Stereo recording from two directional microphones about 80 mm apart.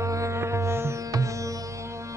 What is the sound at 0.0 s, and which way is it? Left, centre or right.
Music, right.